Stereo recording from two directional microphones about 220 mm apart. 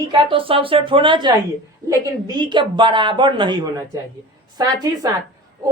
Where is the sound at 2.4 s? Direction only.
20° right (ahead or behind).